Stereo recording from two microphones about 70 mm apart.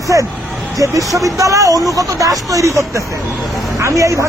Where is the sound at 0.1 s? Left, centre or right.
Right.